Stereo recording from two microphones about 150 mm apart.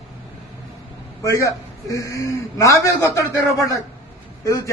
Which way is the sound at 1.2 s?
20° left (ahead or behind).